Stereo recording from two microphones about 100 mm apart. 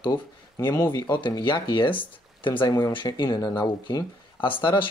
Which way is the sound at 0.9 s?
45° left (ahead or behind).